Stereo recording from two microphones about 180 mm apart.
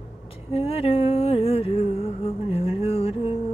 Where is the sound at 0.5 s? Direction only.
35° left (ahead or behind).